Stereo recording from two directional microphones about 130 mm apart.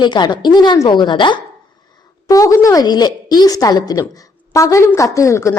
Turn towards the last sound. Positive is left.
turn(degrees=25)  # may be behind; listen again after turning